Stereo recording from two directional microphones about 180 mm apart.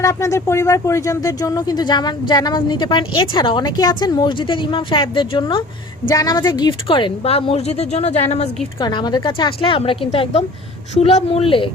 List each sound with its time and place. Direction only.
0.0 s speech: 15° left (ahead or behind); by 8.4 s 35° left (ahead or behind)
8.8 s speech: 25° left (ahead or behind)